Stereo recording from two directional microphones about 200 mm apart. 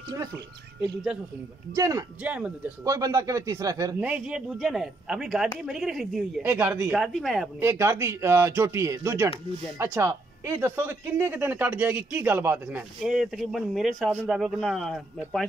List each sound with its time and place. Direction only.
1.8 s speech: 15° right (ahead or behind); by 7.4 s centre (ahead or behind)
7.6 s speech: 15° right (ahead or behind); by 15.4 s centre (ahead or behind)